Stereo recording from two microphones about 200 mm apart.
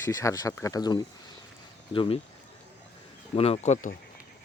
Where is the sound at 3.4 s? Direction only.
35° left (ahead or behind).